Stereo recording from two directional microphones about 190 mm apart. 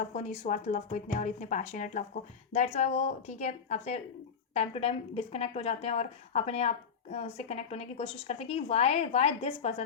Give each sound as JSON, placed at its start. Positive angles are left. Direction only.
{"t": 0.0, "sound": "a woman's voice", "side_deg": 35}